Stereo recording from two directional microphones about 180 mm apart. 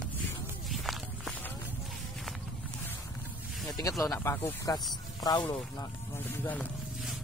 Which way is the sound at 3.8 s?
20° left (ahead or behind).